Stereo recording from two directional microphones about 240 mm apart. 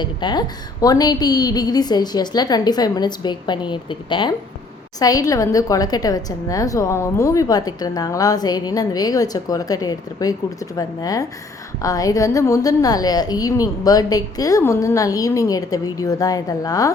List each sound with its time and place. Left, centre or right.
0.0 s a woman's voice: centre